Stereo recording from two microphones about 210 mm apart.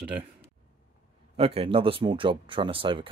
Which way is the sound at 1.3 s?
25° right (ahead or behind).